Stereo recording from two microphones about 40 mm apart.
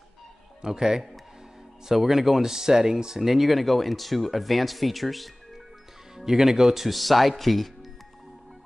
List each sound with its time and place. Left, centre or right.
0.6 s speech: centre
6.1 s speech: centre